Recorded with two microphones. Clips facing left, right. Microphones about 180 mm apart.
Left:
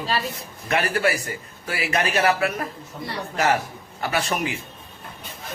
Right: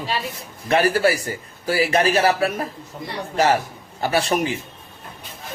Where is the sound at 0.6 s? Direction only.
35° right (ahead or behind).